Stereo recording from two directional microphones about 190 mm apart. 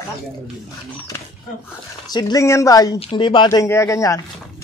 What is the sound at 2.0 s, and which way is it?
Speech, 20° left (ahead or behind).